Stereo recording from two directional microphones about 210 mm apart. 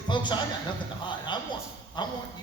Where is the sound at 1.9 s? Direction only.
20° left (ahead or behind).